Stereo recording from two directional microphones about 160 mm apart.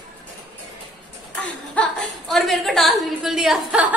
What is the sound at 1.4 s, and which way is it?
A woman's voice, 5° left (ahead or behind).